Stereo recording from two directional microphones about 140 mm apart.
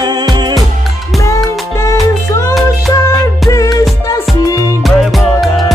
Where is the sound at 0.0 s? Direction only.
30° right (ahead or behind).